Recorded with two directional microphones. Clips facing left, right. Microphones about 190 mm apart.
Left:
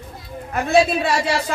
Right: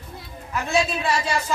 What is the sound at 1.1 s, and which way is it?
Speech, 65° left (ahead or behind).